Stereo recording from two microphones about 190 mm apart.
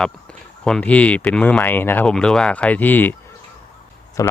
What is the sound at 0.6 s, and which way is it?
Speech, 5° left (ahead or behind).